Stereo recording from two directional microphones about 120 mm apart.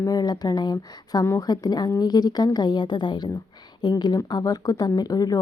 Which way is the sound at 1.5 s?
35° left (ahead or behind).